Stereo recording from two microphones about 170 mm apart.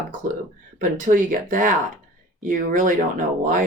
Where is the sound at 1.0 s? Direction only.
50° right (ahead or behind).